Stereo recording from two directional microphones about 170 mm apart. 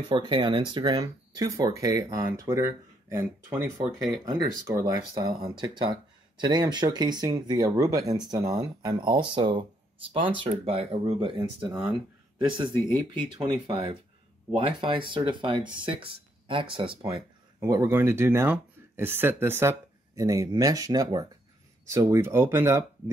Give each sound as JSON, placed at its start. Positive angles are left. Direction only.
{"t": 0.1, "sound": "speech", "side_deg": -25}
{"t": 13.1, "sound": "speech", "side_deg": -25}
{"t": 17.6, "sound": "speech", "side_deg": -20}